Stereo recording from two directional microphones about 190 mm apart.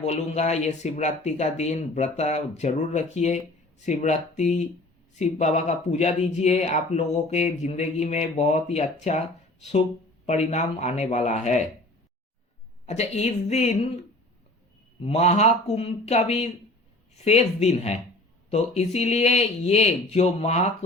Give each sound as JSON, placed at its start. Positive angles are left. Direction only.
{"t": 0.0, "sound": "speech", "side_deg": 35}
{"t": 12.8, "sound": "speech", "side_deg": 35}
{"t": 15.0, "sound": "speech", "side_deg": 35}